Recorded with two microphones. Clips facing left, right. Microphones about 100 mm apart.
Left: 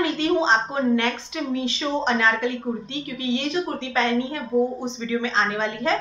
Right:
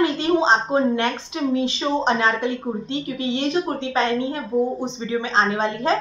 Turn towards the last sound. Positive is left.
turn(degrees=-30)  # may be behind; listen again after turning